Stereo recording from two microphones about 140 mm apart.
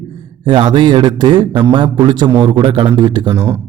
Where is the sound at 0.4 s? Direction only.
35° right (ahead or behind).